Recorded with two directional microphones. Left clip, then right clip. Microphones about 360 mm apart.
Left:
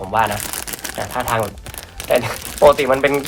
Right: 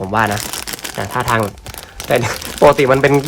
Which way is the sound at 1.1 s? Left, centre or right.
Right.